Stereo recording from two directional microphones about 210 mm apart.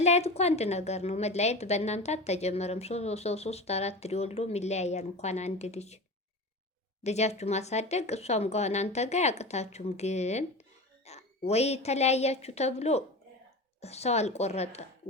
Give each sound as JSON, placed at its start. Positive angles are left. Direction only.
{"t": 0.0, "sound": "a woman's voice", "side_deg": 30}
{"t": 7.0, "sound": "a woman's voice", "side_deg": 30}